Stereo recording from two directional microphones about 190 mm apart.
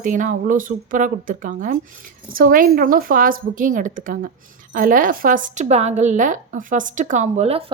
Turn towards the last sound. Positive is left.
turn(degrees=-35)  # may be behind; listen again after turning